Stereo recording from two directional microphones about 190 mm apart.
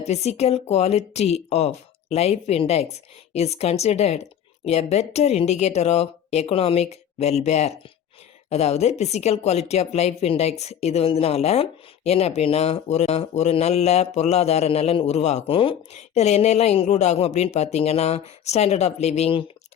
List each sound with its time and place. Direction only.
0.0 s speech: 35° left (ahead or behind)